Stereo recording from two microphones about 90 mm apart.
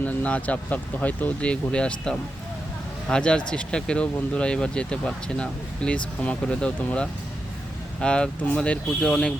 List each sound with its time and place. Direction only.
0.0 s speech: 15° left (ahead or behind)